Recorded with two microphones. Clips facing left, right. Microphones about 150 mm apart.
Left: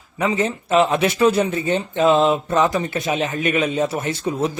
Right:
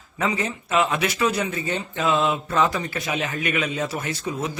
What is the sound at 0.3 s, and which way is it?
Speech, 25° left (ahead or behind).